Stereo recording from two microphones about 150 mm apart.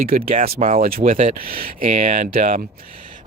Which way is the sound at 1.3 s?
75° right (ahead or behind).